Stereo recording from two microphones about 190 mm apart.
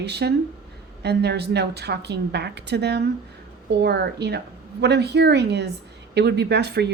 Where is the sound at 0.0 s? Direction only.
60° right (ahead or behind).